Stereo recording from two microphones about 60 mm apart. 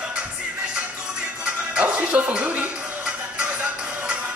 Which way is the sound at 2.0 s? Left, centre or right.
Right.